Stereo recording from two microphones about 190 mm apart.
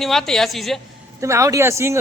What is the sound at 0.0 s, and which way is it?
Speech, centre (ahead or behind).